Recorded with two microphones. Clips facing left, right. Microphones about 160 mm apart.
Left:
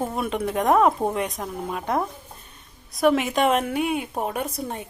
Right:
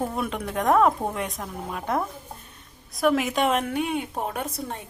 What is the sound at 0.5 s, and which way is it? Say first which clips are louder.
Speech: left 1 dB; 15° left (ahead or behind).